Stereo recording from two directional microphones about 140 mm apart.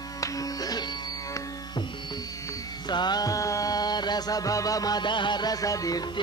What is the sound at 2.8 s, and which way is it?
Music, 30° left (ahead or behind).